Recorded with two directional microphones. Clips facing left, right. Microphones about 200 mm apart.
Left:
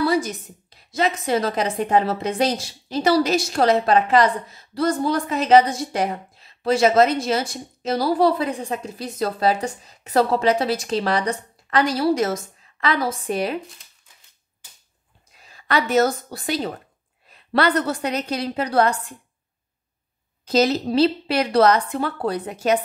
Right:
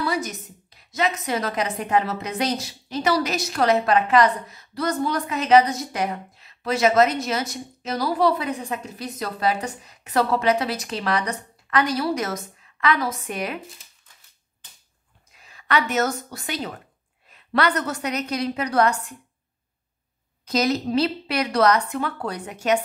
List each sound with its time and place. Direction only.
0.0 s a woman's voice: 30° left (ahead or behind)
15.4 s a woman's voice: 35° left (ahead or behind)
20.4 s a woman's voice: 30° left (ahead or behind)